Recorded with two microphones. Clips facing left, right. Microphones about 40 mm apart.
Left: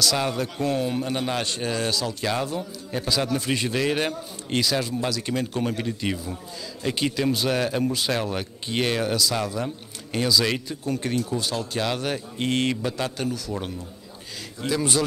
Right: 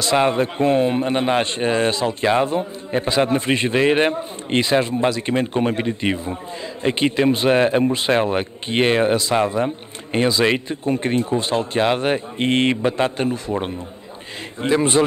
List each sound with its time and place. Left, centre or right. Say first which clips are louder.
0.0 s speech: right 7 dB; right